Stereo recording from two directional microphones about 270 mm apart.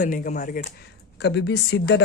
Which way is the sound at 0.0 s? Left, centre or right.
Left.